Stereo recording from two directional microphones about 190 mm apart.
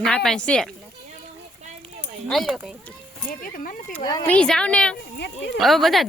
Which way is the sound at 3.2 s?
45° left (ahead or behind).